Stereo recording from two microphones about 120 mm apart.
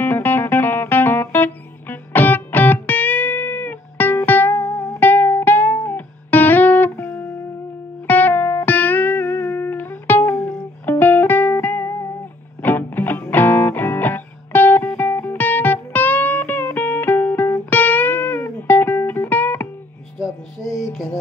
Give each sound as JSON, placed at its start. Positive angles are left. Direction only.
{"t": 0.0, "sound": "music", "side_deg": 15}
{"t": 4.6, "sound": "music", "side_deg": 30}
{"t": 5.0, "sound": "music", "side_deg": 15}